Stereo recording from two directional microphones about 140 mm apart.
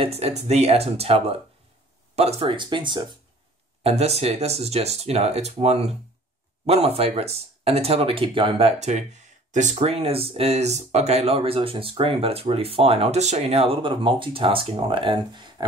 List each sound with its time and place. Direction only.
0.0 s speech: 45° right (ahead or behind)
3.8 s speech: 50° right (ahead or behind)